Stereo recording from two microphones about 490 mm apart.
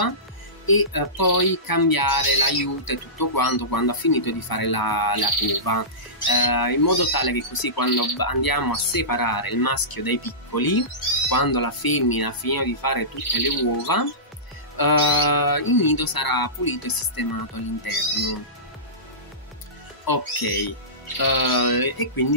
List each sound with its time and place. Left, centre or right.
0.7 s speech: left
20.1 s speech: left